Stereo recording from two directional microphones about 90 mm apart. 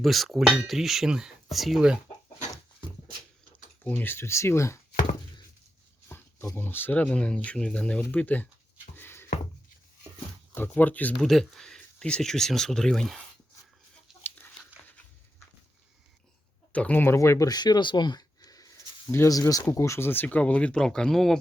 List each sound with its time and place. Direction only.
0.0 s cutlery: centre (ahead or behind)
3.8 s speech: 20° left (ahead or behind)
6.1 s a sound: 25° left (ahead or behind)
6.6 s speech: 25° left (ahead or behind)
9.0 s music: 25° left (ahead or behind)
10.5 s speech: 20° left (ahead or behind)
11.2 s speech: 5° left (ahead or behind)
14.3 s chicken: 25° left (ahead or behind)
16.7 s speech: 15° left (ahead or behind)
17.2 s speech: 35° left (ahead or behind)
17.5 s a sound: 50° left (ahead or behind)
19.1 s speech: 35° left (ahead or behind); by 21.3 s 5° left (ahead or behind)